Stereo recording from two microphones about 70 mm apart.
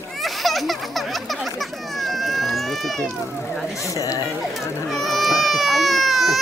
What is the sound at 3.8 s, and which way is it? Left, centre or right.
Speech, left.